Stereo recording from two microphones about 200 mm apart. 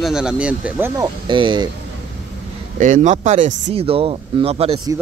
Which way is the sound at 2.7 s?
40° right (ahead or behind).